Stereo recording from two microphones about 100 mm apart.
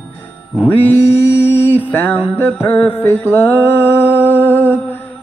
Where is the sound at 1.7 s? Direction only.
20° left (ahead or behind).